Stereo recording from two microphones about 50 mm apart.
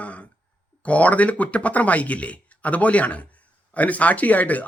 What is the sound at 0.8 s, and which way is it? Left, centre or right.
Speech, left.